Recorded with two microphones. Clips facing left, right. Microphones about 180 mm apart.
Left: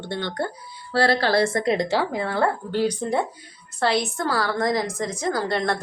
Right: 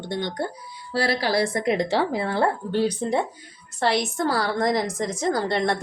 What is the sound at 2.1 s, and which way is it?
A woman's voice, 30° right (ahead or behind).